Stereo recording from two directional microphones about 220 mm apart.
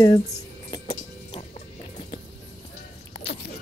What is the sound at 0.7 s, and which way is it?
Music, 20° left (ahead or behind).